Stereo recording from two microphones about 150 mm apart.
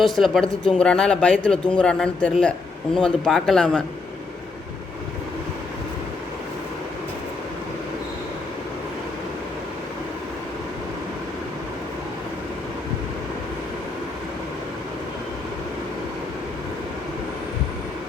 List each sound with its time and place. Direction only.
0.0 s a man's voice: centre (ahead or behind)